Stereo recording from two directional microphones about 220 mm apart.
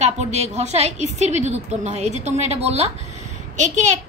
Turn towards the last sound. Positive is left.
turn(degrees=-30)  # may be behind; listen again after turning